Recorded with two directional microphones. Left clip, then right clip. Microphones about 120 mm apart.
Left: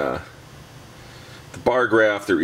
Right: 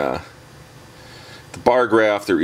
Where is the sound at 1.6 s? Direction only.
25° right (ahead or behind).